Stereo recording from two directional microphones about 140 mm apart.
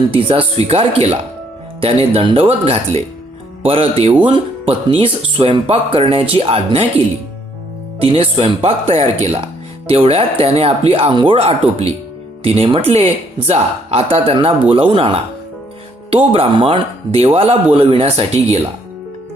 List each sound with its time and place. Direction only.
0.1 s speech: 40° right (ahead or behind)
8.0 s speech: 45° right (ahead or behind)